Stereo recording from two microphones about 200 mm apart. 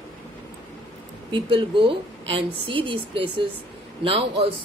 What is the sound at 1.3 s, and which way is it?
A woman's voice, 25° right (ahead or behind).